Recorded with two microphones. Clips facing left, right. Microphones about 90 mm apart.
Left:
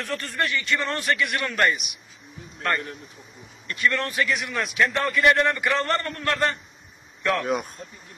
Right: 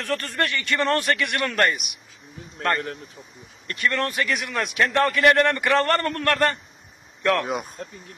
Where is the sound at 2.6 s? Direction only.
55° right (ahead or behind).